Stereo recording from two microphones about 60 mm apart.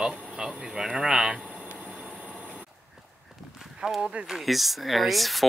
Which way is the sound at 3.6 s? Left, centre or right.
Centre.